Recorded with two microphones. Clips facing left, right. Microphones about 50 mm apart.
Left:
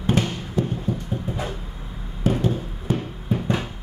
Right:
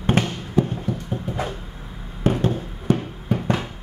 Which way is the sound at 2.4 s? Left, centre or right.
Right.